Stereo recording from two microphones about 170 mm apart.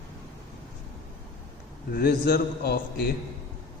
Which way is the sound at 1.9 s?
65° left (ahead or behind).